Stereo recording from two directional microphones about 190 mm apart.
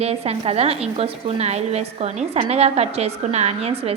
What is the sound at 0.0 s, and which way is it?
A woman's voice, 35° right (ahead or behind).